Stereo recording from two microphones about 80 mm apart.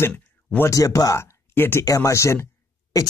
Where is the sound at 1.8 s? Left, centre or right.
Left.